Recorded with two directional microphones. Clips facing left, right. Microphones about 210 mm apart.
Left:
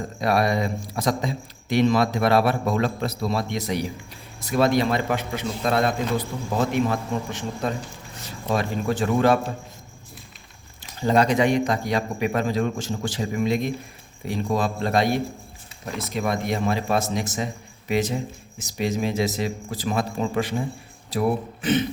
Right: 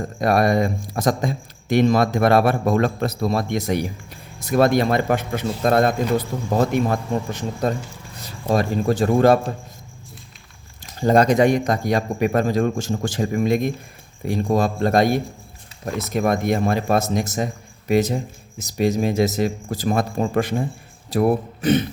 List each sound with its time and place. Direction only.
0.2 s a man's voice: 50° right (ahead or behind)
11.0 s a man's voice: 45° right (ahead or behind)